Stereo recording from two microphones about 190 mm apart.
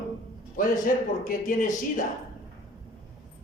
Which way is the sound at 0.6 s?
45° left (ahead or behind).